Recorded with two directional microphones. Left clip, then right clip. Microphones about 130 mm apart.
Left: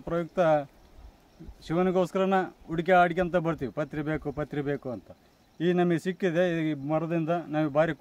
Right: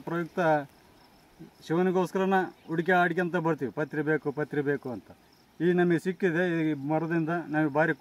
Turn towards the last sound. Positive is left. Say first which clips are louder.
# even
turn(degrees=50)  # may be behind; listen again after turning